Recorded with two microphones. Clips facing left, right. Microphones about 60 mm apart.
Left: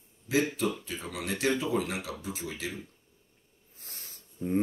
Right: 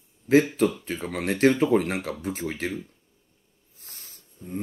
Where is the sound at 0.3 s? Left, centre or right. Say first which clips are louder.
Right 8 dB; right.